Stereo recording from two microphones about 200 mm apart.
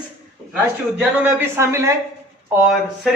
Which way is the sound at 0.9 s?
10° right (ahead or behind).